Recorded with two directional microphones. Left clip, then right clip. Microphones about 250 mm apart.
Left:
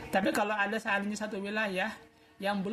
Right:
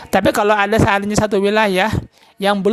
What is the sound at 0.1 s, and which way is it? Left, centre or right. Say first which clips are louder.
Speech: right 15 dB; right.